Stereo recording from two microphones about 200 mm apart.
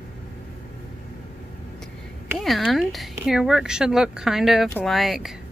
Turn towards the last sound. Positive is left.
turn(degrees=0)  # may be behind; listen again after turning